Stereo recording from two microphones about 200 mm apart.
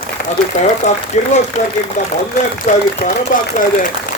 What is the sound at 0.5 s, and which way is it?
Speech, 35° left (ahead or behind).